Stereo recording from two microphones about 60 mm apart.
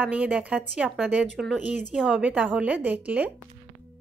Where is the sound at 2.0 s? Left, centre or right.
Centre.